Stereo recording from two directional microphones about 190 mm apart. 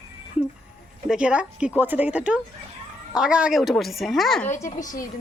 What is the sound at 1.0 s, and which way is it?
Speech, 5° right (ahead or behind).